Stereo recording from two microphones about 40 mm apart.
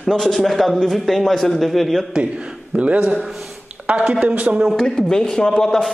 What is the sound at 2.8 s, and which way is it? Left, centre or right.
A man's voice, right.